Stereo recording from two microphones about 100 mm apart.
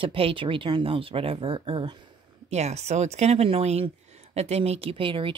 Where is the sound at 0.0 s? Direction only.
65° right (ahead or behind).